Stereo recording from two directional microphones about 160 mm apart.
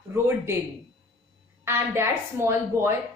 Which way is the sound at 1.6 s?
15° right (ahead or behind).